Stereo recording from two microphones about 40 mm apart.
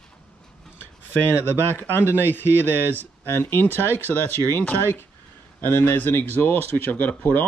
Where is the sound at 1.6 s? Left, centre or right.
Right.